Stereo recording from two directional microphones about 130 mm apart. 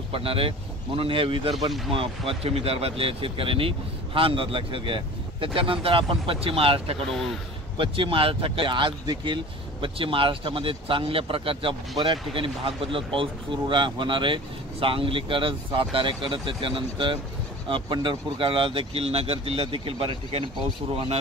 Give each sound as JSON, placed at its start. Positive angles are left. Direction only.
{"t": 0.1, "sound": "speech", "side_deg": -45}